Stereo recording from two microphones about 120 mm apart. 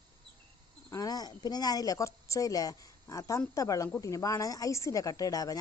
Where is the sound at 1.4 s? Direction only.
35° left (ahead or behind).